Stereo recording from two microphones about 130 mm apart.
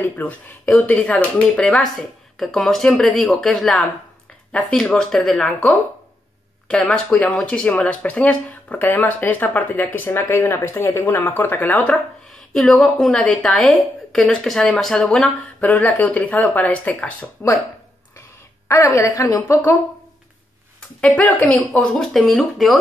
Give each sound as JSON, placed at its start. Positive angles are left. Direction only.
{"t": 0.2, "sound": "a woman's voice", "side_deg": 10}
{"t": 18.7, "sound": "a woman's voice", "side_deg": 25}
{"t": 21.0, "sound": "a woman's voice", "side_deg": 10}